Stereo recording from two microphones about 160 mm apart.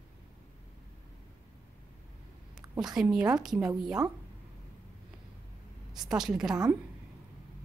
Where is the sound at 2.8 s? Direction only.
5° right (ahead or behind).